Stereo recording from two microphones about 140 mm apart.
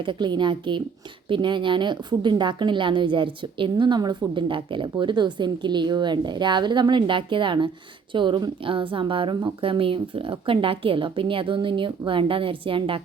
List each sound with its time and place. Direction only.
0.0 s a woman's voice: 35° right (ahead or behind)